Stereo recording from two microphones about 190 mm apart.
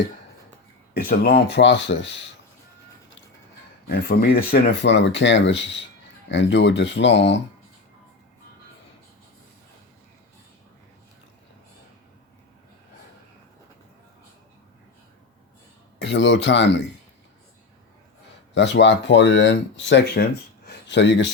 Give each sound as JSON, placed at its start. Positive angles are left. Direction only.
{"t": 1.0, "sound": "speech", "side_deg": 50}
{"t": 3.8, "sound": "speech", "side_deg": 55}
{"t": 16.0, "sound": "speech", "side_deg": 70}
{"t": 18.5, "sound": "speech", "side_deg": 70}
{"t": 20.7, "sound": "a sound", "side_deg": 65}